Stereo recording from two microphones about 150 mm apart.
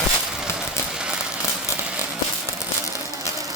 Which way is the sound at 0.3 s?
5° right (ahead or behind).